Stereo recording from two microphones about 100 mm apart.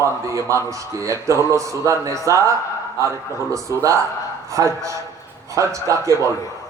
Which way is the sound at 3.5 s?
30° right (ahead or behind).